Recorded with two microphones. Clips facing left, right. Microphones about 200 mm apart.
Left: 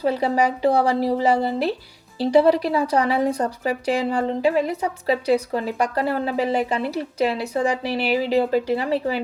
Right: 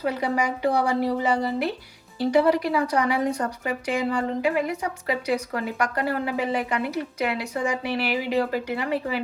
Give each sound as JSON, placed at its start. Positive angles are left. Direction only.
{"t": 0.0, "sound": "speech", "side_deg": 30}